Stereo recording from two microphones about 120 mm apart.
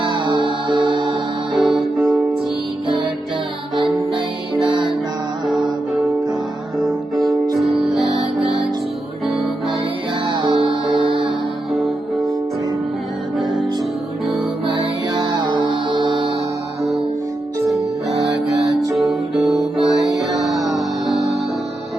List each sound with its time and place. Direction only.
0.0 s music: 45° right (ahead or behind)
1.5 s music: centre (ahead or behind)
7.6 s music: centre (ahead or behind)
10.2 s music: 40° right (ahead or behind)
15.1 s music: 35° right (ahead or behind)
18.3 s music: 30° right (ahead or behind)
18.9 s music: centre (ahead or behind)
20.5 s music: 30° right (ahead or behind)
20.7 s music: centre (ahead or behind)